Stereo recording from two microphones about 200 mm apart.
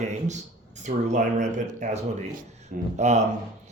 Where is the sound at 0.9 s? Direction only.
40° right (ahead or behind).